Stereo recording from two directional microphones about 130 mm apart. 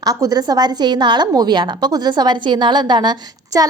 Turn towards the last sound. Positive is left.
turn(degrees=-30)  # may be behind; listen again after turning